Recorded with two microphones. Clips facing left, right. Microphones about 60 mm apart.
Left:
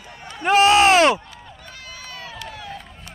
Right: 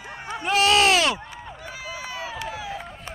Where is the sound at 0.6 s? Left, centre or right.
Left.